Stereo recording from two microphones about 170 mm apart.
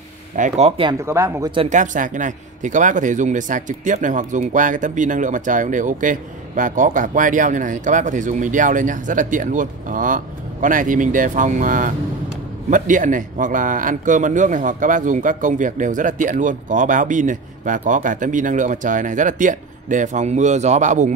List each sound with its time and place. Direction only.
0.4 s speech: 40° right (ahead or behind)
1.0 s speech: 15° right (ahead or behind)
1.7 s speech: 50° right (ahead or behind)